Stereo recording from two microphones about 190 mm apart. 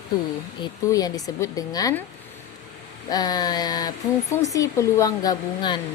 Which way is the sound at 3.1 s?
20° left (ahead or behind).